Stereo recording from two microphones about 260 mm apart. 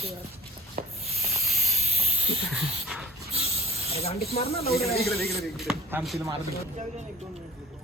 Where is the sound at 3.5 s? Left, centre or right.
Right.